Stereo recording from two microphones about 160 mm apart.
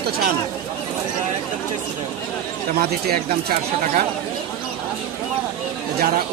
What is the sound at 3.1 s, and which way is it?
Speech, 70° right (ahead or behind).